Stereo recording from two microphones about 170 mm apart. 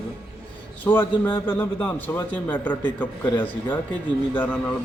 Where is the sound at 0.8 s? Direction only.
10° left (ahead or behind).